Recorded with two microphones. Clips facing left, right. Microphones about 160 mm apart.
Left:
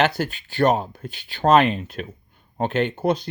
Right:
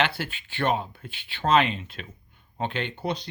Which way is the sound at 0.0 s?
40° left (ahead or behind).